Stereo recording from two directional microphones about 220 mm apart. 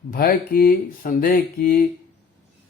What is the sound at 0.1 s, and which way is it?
A man's voice, 40° left (ahead or behind).